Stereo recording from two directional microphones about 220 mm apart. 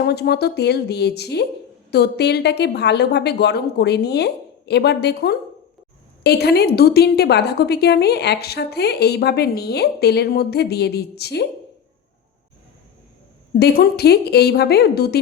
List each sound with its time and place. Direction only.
0.0 s a woman's voice: 45° left (ahead or behind)
13.6 s a woman's voice: 45° left (ahead or behind)